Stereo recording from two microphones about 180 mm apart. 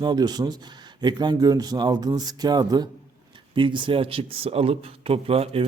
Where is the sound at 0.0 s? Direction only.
25° right (ahead or behind).